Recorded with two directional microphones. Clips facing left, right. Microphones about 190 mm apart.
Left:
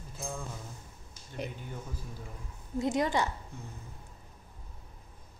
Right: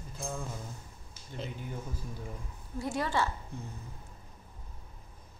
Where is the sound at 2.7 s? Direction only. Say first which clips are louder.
Left 3 dB; 20° left (ahead or behind).